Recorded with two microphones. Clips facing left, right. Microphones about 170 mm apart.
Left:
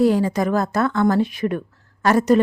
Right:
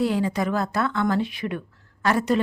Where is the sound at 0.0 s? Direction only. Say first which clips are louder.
Left 6 dB; 45° left (ahead or behind).